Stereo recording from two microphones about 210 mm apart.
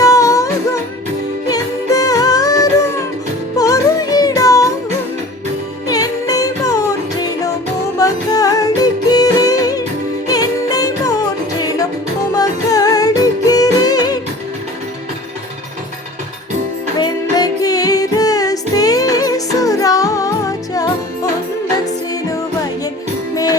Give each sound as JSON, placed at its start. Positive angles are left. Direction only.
{"t": 0.0, "sound": "music", "side_deg": 15}
{"t": 5.9, "sound": "music", "side_deg": 15}
{"t": 12.3, "sound": "music", "side_deg": 15}
{"t": 17.0, "sound": "music", "side_deg": 20}
{"t": 23.3, "sound": "music", "side_deg": 15}